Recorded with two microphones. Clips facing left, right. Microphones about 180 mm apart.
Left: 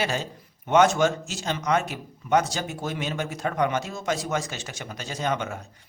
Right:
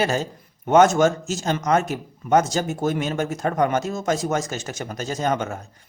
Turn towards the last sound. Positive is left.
turn(degrees=-45)  # may be behind; listen again after turning